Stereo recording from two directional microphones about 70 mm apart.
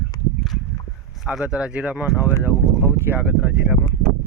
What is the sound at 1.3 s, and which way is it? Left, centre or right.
Speech, centre.